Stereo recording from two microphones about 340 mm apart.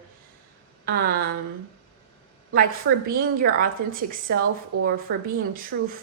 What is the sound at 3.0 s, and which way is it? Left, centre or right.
A woman's voice, right.